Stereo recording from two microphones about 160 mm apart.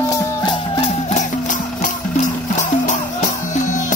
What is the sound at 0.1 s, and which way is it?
Music, 25° left (ahead or behind).